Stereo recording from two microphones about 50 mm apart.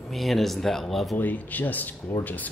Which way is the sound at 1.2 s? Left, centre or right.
Left.